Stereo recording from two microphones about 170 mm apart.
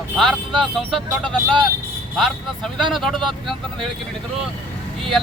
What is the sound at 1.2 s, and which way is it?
Speech, 30° right (ahead or behind).